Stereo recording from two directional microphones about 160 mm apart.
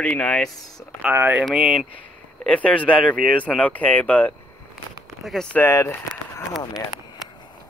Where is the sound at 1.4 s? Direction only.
Centre (ahead or behind); by 6.4 s 15° left (ahead or behind).